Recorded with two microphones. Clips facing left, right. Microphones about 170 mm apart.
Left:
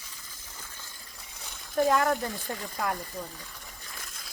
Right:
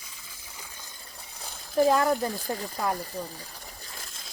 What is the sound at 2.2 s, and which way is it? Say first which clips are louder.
Speech: right 4 dB; 35° right (ahead or behind).